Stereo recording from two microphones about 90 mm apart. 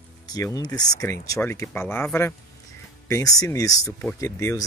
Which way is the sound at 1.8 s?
25° left (ahead or behind).